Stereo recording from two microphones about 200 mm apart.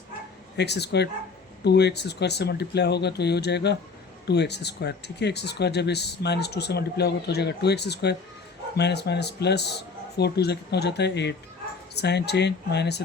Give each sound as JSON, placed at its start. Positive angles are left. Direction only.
{"t": 0.5, "sound": "speech", "side_deg": 55}